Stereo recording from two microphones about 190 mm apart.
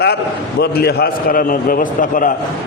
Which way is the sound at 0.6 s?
55° left (ahead or behind).